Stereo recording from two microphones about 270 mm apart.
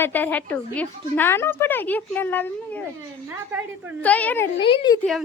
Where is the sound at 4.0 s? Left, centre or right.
Centre.